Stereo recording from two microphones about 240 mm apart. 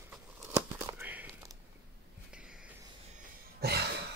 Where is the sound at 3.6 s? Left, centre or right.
Right.